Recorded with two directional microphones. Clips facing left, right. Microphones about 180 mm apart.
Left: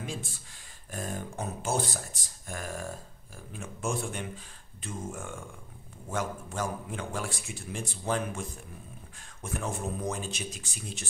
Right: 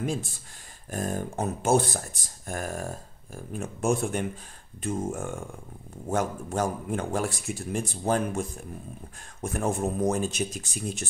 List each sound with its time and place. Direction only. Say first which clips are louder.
0.9 s a man's voice: right 6 dB; 45° right (ahead or behind)